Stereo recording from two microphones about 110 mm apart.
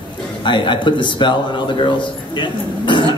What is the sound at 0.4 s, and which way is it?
A man's voice, 50° left (ahead or behind).